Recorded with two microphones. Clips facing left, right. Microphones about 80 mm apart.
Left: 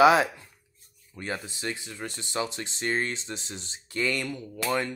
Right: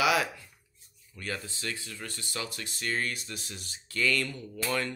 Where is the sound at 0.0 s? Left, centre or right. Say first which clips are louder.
Left 8 dB; left.